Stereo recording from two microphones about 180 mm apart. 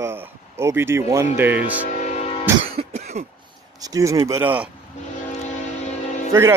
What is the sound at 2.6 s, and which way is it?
Cough, 35° right (ahead or behind).